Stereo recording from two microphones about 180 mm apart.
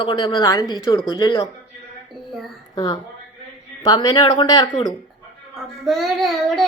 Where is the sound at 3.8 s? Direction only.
25° left (ahead or behind).